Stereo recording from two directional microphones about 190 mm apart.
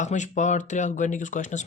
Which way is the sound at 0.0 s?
40° left (ahead or behind).